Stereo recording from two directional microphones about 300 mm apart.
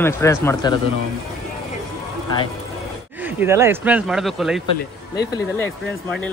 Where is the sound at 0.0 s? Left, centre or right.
Centre.